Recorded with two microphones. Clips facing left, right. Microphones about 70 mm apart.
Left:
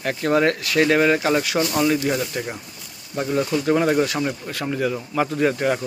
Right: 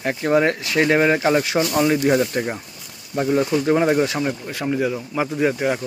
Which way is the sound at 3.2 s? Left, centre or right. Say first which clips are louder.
Right 3 dB; centre.